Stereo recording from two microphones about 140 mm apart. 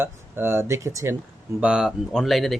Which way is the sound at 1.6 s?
5° right (ahead or behind).